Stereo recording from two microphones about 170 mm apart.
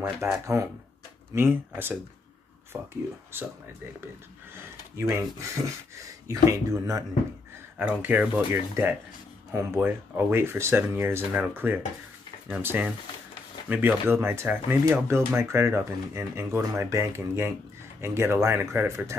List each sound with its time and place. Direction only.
0.0 s speech: 10° right (ahead or behind)
4.9 s speech: 15° right (ahead or behind)
6.2 s speech: 20° right (ahead or behind)
7.8 s speech: 10° right (ahead or behind)